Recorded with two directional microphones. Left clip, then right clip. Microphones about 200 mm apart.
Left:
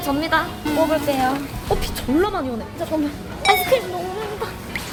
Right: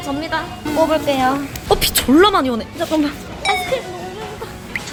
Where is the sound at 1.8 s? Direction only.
30° right (ahead or behind).